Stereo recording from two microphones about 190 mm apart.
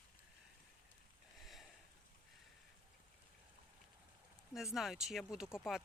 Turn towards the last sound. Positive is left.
turn(degrees=0)  # may be behind; listen again after turning